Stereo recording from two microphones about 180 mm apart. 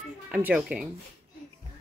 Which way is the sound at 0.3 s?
5° right (ahead or behind).